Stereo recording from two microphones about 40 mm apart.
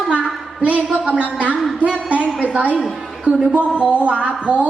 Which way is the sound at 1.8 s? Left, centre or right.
Right.